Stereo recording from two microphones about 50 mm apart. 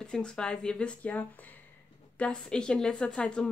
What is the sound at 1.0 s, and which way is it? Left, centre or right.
Speech, left.